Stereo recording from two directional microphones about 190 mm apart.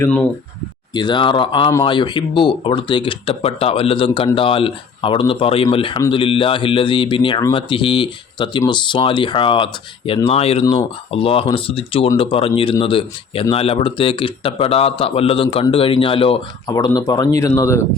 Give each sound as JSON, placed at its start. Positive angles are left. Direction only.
{"t": 0.0, "sound": "speech", "side_deg": 5}
{"t": 0.9, "sound": "speech", "side_deg": 25}